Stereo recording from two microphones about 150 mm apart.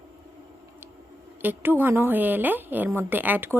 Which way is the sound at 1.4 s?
15° right (ahead or behind).